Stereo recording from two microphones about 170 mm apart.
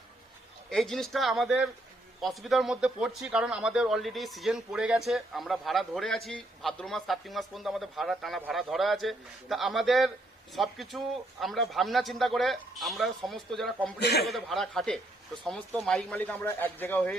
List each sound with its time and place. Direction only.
0.7 s speech: centre (ahead or behind)
14.0 s a man's voice: 70° left (ahead or behind)
14.3 s a man's voice: centre (ahead or behind)